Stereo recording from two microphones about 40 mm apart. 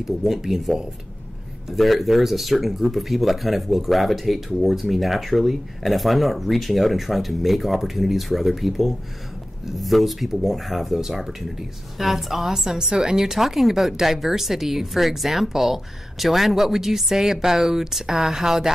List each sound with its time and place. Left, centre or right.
0.4 s speech: centre
12.7 s a woman's voice: centre
13.2 s speech: centre